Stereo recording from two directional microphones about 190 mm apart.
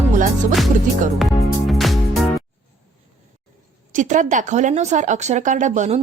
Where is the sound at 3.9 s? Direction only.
40° right (ahead or behind).